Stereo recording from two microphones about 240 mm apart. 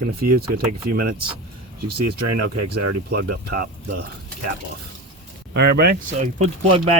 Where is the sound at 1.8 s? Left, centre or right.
Right.